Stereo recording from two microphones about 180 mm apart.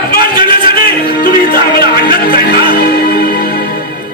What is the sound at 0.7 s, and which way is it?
Music, 55° left (ahead or behind).